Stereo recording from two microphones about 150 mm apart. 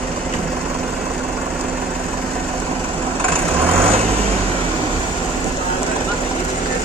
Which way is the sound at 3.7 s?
40° right (ahead or behind).